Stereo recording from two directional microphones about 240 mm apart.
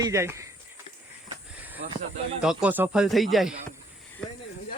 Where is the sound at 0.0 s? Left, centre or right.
Centre.